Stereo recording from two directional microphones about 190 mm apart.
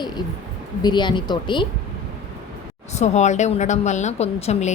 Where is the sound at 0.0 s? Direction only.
20° left (ahead or behind).